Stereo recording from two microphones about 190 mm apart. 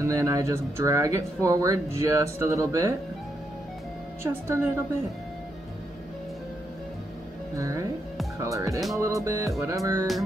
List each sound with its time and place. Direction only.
0.0 s speech: 15° right (ahead or behind)
4.2 s speech: 10° right (ahead or behind)
7.5 s speech: 15° right (ahead or behind)